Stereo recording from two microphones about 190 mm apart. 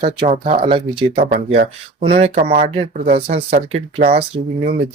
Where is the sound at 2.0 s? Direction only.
30° right (ahead or behind).